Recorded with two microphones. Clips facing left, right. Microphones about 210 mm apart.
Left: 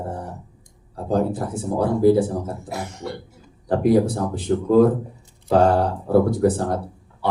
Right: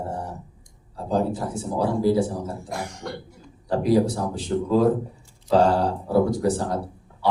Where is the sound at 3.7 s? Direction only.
55° left (ahead or behind).